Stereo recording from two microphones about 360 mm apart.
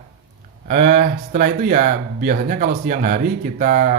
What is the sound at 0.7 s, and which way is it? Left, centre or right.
Speech, centre.